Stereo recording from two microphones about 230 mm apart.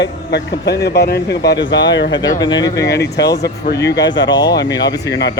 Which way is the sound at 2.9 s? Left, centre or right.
Left.